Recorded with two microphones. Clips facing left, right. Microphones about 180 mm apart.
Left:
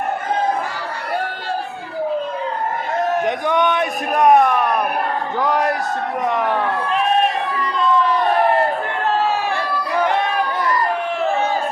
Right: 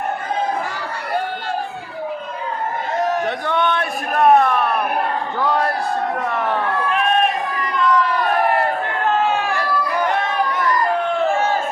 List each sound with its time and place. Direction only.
3.2 s a man's voice: 15° left (ahead or behind)
5.4 s a sound: 15° left (ahead or behind)
6.2 s speech: 15° left (ahead or behind)